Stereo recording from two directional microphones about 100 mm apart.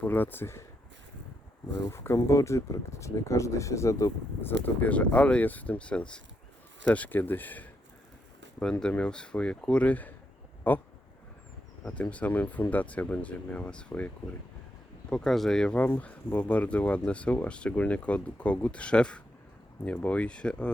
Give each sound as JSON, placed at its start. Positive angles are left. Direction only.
{"t": 0.0, "sound": "speech", "side_deg": 20}
{"t": 1.9, "sound": "speech", "side_deg": 25}
{"t": 8.8, "sound": "speech", "side_deg": 10}
{"t": 11.9, "sound": "speech", "side_deg": 15}
{"t": 15.1, "sound": "speech", "side_deg": 0}